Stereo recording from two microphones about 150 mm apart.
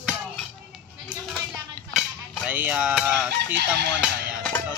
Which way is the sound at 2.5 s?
10° right (ahead or behind).